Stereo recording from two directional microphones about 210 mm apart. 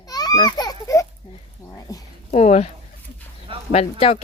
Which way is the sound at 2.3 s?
30° left (ahead or behind).